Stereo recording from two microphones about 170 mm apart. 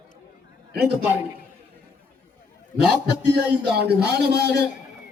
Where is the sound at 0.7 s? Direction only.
70° right (ahead or behind).